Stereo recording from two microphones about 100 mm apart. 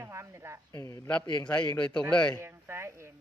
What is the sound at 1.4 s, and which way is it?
Speech, 10° left (ahead or behind).